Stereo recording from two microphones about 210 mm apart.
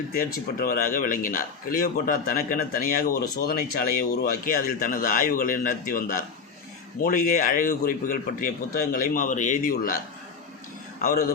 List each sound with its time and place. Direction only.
0.1 s a man's voice: 45° left (ahead or behind)
11.0 s a man's voice: 45° left (ahead or behind)